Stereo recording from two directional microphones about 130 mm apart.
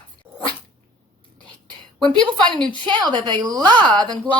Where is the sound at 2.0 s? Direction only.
35° right (ahead or behind).